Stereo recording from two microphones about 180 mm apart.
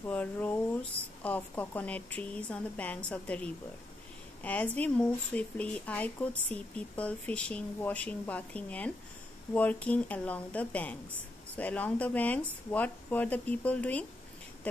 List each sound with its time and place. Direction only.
0.0 s speech: 10° left (ahead or behind)